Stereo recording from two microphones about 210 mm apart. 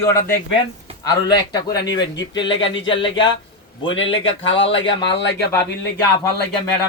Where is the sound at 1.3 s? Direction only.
20° left (ahead or behind).